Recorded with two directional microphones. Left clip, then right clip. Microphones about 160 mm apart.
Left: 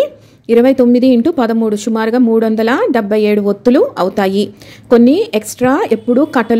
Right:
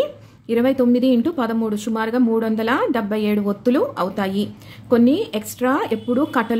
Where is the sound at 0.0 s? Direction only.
40° left (ahead or behind).